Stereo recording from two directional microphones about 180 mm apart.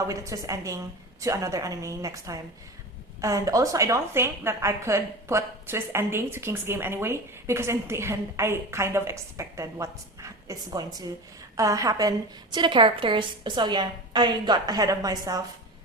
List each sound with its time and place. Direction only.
0.1 s a woman's voice: 15° right (ahead or behind)